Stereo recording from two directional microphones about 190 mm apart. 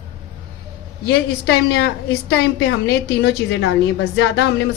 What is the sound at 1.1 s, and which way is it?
A woman's voice, 60° left (ahead or behind).